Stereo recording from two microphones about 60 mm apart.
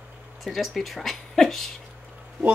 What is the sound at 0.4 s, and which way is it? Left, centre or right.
Speech, centre.